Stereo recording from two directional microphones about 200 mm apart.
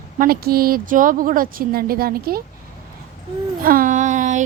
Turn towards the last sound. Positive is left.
turn(degrees=-40)  # may be behind; listen again after turning